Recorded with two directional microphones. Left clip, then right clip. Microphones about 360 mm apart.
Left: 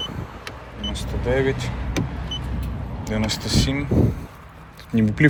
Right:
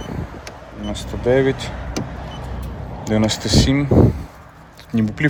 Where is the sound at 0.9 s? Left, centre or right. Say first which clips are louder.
Right 7 dB; centre.